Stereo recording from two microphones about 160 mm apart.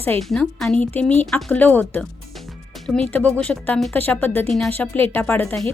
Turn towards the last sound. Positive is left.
turn(degrees=10)  # may be behind; listen again after turning